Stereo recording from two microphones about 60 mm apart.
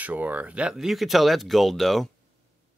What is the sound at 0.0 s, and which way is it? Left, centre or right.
Speech, right.